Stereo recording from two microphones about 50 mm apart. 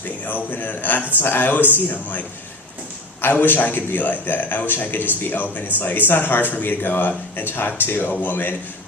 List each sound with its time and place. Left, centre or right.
0.3 s a man's voice: left